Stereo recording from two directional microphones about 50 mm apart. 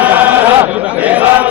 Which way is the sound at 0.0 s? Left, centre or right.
Right.